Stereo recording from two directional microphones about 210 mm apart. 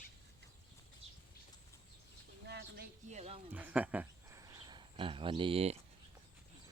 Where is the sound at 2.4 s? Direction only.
50° right (ahead or behind).